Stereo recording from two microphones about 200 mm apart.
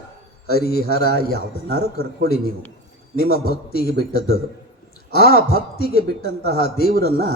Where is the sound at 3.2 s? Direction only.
50° left (ahead or behind).